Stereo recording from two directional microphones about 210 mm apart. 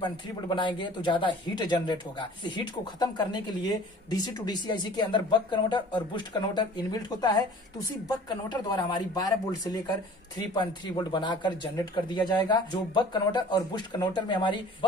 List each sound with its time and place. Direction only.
0.0 s speech: 20° left (ahead or behind)